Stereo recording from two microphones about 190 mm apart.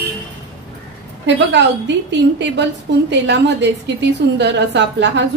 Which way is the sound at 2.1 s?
70° right (ahead or behind).